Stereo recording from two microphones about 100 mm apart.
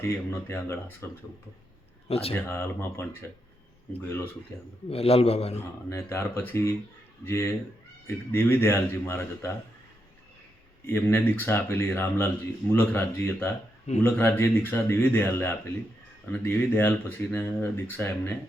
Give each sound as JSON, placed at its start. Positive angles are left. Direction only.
{"t": 0.1, "sound": "speech", "side_deg": 25}
{"t": 2.0, "sound": "speech", "side_deg": 75}
{"t": 2.3, "sound": "speech", "side_deg": 25}
{"t": 4.5, "sound": "speech", "side_deg": 25}
{"t": 4.9, "sound": "a man's voice", "side_deg": 80}
{"t": 5.9, "sound": "speech", "side_deg": 25}
{"t": 10.8, "sound": "speech", "side_deg": 25}